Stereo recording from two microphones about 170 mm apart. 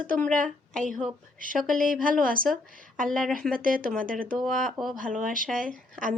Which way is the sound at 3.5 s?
55° right (ahead or behind).